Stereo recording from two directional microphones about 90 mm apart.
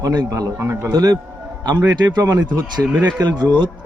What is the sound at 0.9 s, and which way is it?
Speech, 45° right (ahead or behind).